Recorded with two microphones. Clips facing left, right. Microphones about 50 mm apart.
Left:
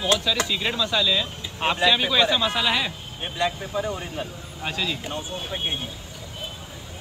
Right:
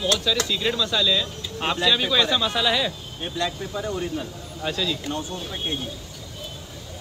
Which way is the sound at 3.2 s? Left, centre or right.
Left.